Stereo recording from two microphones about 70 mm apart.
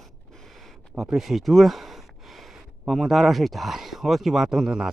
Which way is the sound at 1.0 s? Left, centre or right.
Centre.